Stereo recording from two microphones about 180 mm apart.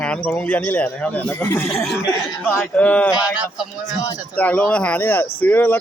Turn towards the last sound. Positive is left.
turn(degrees=10)  # may be behind; listen again after turning